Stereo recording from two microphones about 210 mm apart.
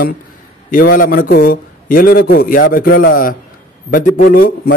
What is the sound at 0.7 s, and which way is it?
A man's voice, 40° left (ahead or behind).